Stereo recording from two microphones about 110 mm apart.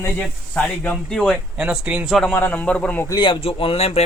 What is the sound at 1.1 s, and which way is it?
Speech, centre (ahead or behind).